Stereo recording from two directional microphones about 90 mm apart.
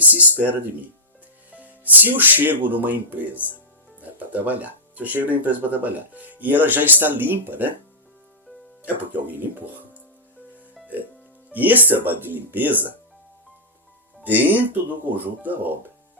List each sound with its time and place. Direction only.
0.0 s speech: 20° right (ahead or behind)
1.5 s music: 15° right (ahead or behind)
2.6 s speech: 20° right (ahead or behind)
8.8 s speech: 20° right (ahead or behind)
11.5 s speech: 20° right (ahead or behind)
14.3 s speech: 20° right (ahead or behind)